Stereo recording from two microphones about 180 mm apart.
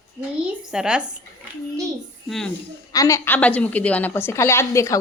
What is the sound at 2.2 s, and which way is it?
Speech, centre (ahead or behind).